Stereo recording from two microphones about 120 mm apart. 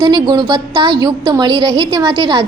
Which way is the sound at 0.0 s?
35° right (ahead or behind).